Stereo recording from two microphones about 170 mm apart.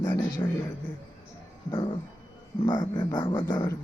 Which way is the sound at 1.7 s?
30° left (ahead or behind).